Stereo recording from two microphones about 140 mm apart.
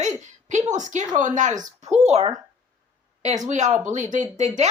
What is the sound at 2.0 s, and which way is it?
Speech, 50° right (ahead or behind).